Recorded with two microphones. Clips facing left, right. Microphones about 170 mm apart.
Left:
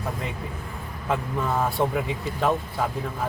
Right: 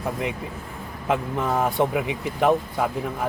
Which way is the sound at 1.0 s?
20° right (ahead or behind).